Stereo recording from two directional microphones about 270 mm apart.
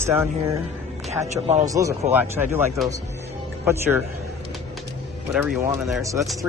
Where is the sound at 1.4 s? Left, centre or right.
Right.